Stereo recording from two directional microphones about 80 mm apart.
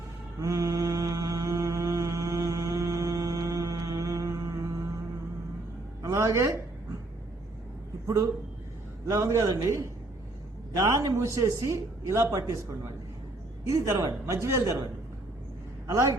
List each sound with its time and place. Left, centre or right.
0.3 s mantra: right
6.0 s speech: right
8.0 s a man's voice: right
10.8 s a man's voice: right
13.7 s a man's voice: right
15.9 s a man's voice: right